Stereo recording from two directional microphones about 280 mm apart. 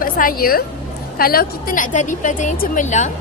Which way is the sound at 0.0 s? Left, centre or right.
Left.